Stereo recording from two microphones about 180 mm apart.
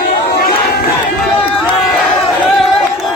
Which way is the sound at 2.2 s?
Centre (ahead or behind).